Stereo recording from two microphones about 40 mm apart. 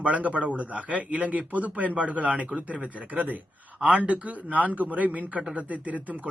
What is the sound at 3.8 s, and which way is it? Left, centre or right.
Speech, right.